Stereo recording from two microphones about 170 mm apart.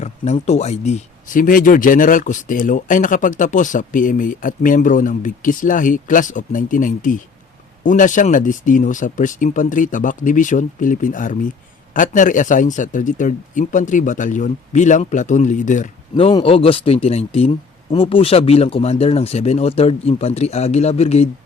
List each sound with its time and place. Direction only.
0.0 s speech: 40° left (ahead or behind)
16.1 s speech: 30° left (ahead or behind)